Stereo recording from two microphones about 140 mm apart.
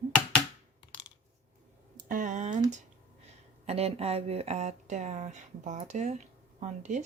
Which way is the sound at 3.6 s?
45° right (ahead or behind).